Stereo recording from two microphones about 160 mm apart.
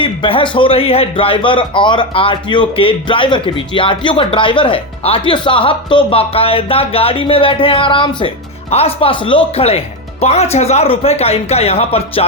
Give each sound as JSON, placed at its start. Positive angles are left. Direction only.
{"t": 0.0, "sound": "a man's voice", "side_deg": 35}